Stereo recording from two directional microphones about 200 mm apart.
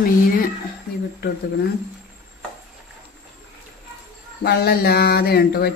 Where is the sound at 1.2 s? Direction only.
60° left (ahead or behind).